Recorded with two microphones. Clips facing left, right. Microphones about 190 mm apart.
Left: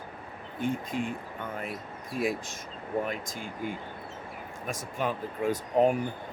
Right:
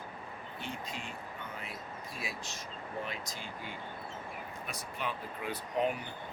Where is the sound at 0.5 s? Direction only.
50° left (ahead or behind).